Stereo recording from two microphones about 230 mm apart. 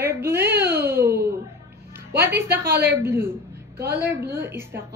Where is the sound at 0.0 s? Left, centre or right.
Centre.